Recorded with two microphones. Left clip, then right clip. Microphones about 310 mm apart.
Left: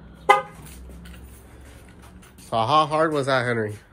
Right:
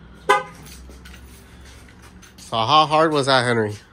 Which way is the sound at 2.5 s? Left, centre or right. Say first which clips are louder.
Right 4 dB; centre.